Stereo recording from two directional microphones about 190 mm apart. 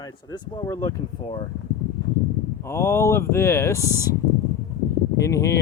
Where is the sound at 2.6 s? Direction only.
15° left (ahead or behind).